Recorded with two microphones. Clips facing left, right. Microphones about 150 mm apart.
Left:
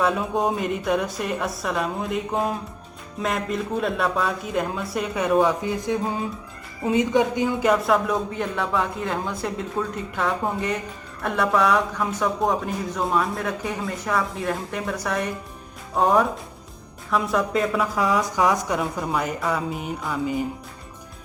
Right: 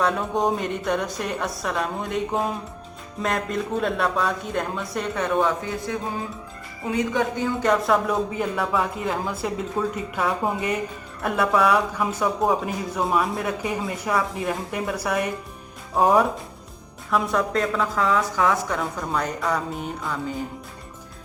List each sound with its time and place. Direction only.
0.0 s speech: centre (ahead or behind)
5.9 s speech: 20° left (ahead or behind)
7.7 s speech: centre (ahead or behind)